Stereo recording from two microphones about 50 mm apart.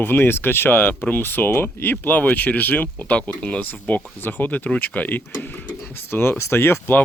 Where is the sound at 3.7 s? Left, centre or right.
Left.